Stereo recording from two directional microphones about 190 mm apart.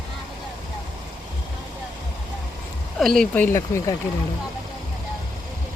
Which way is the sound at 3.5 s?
15° left (ahead or behind).